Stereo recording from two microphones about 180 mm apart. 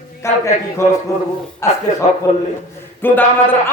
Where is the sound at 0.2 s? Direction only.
15° left (ahead or behind).